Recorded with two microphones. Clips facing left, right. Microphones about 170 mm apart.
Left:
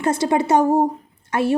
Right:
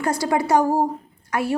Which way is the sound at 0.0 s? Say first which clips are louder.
Left 3 dB; 25° left (ahead or behind).